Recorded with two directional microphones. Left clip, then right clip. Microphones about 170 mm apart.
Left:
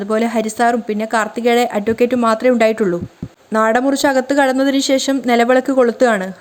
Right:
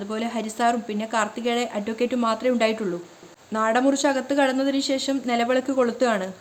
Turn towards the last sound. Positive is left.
turn(degrees=40)  # may be behind; listen again after turning